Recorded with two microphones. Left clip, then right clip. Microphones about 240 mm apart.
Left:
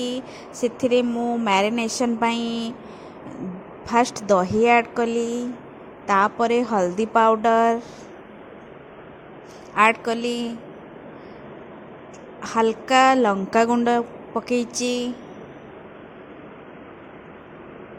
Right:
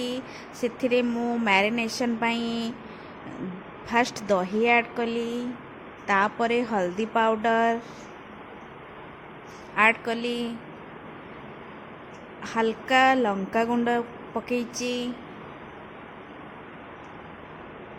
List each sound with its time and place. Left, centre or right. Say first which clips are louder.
0.0 s speech: left 3 dB; left
3.8 s speech: left 5 dB; left
9.7 s speech: left 4 dB; left
12.4 s speech: left 5 dB; left